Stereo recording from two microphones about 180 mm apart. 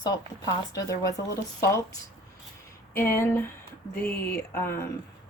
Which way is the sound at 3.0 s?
10° left (ahead or behind).